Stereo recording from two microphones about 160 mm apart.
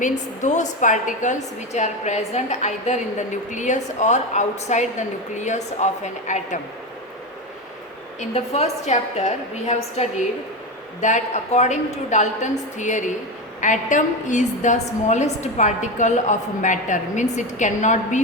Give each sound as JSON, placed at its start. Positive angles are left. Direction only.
{"t": 0.0, "sound": "a woman's voice", "side_deg": 50}
{"t": 8.2, "sound": "a woman's voice", "side_deg": 40}